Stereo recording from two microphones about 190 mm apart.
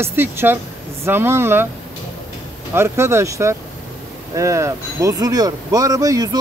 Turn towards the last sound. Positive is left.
turn(degrees=-20)  # may be behind; listen again after turning